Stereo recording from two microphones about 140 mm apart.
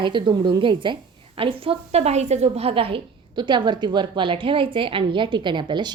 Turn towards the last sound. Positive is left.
turn(degrees=-35)  # may be behind; listen again after turning